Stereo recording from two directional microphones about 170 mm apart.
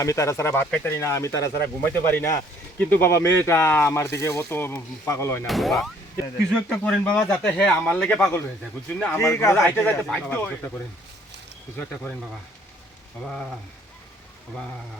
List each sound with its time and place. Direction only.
0.0 s speech: 20° left (ahead or behind)
5.5 s speech: centre (ahead or behind)
11.8 s speech: 10° left (ahead or behind)